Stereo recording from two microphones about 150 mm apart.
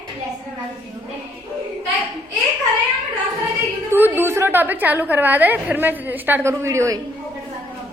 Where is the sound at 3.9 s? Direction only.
15° right (ahead or behind).